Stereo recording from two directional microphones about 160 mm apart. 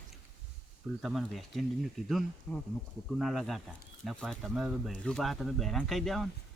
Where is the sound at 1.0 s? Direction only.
Centre (ahead or behind).